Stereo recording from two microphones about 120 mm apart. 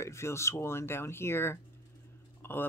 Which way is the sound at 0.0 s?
25° left (ahead or behind).